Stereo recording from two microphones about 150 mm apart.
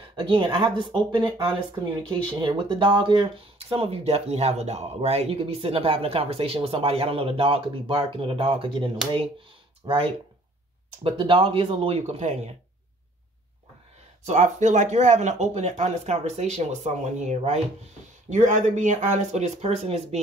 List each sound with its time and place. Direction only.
0.1 s speech: 30° right (ahead or behind)
14.2 s speech: 50° right (ahead or behind)